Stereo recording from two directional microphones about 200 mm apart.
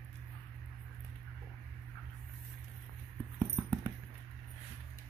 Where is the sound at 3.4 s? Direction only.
10° left (ahead or behind).